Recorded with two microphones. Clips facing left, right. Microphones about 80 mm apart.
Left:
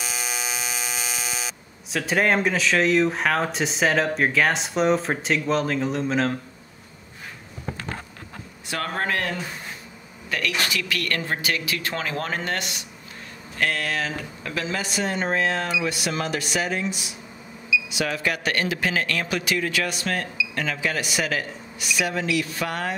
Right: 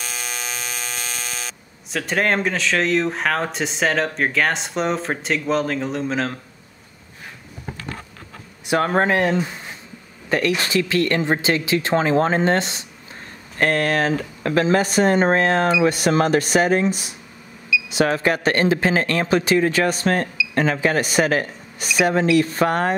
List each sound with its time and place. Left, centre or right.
0.0 s electric toothbrush: centre
8.6 s speech: right
13.6 s speech: right